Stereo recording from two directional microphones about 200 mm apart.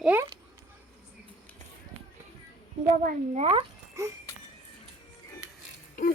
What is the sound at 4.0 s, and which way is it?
Speech, 15° right (ahead or behind).